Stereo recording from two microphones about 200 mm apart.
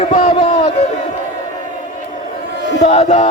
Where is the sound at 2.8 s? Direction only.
35° left (ahead or behind).